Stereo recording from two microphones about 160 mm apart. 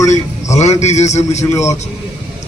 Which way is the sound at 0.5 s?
45° left (ahead or behind).